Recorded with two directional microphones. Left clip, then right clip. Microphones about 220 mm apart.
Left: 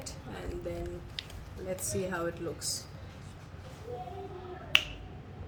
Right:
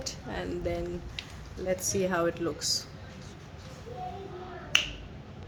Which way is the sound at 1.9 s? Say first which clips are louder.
Right 6 dB; 35° right (ahead or behind).